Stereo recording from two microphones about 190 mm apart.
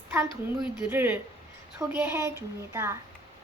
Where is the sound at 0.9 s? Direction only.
10° right (ahead or behind).